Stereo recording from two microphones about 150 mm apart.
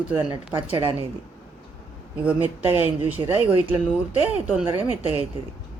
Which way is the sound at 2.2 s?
10° right (ahead or behind).